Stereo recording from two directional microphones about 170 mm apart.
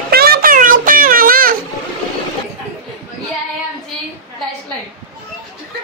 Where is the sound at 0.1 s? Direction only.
65° right (ahead or behind).